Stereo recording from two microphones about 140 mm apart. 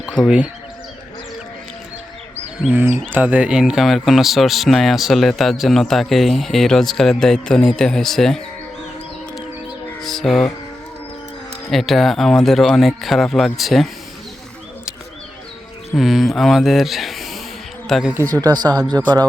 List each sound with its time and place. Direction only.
0.2 s speech: 30° left (ahead or behind)
2.6 s speech: 15° right (ahead or behind); by 8.4 s centre (ahead or behind)
10.0 s music: centre (ahead or behind)
11.7 s speech: centre (ahead or behind)
16.0 s speech: centre (ahead or behind)
18.1 s speech: 20° right (ahead or behind)